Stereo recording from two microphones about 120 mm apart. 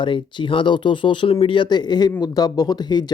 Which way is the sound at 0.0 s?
45° left (ahead or behind).